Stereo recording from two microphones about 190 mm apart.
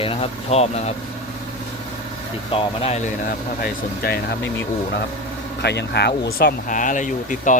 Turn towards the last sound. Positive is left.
turn(degrees=40)  # may be behind; listen again after turning